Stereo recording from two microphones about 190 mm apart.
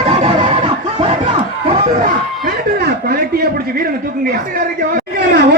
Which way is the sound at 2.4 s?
55° right (ahead or behind).